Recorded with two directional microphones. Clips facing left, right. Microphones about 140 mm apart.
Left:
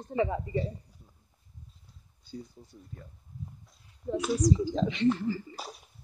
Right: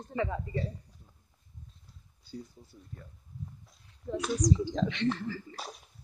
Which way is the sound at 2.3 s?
Centre (ahead or behind).